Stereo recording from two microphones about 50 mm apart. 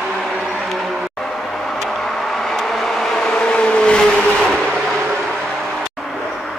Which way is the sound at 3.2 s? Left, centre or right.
Left.